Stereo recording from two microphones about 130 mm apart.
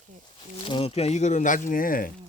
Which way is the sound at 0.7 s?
45° left (ahead or behind).